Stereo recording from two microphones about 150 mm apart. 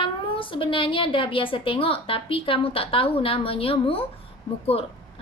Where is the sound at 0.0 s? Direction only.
35° left (ahead or behind).